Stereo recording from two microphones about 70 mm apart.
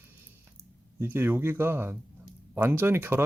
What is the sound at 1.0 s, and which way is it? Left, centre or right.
Speech, right.